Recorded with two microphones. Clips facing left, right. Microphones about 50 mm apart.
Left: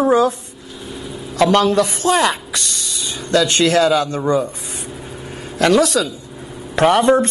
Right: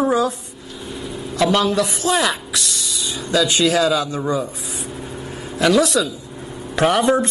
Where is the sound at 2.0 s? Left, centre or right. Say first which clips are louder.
Left 2 dB; left.